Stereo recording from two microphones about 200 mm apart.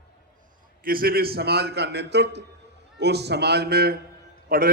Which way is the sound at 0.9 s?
45° right (ahead or behind).